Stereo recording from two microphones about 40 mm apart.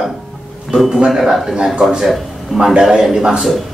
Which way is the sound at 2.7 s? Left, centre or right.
Centre.